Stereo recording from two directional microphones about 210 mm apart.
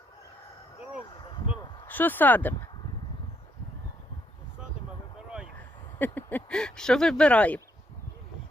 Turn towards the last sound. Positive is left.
turn(degrees=5)  # may be behind; listen again after turning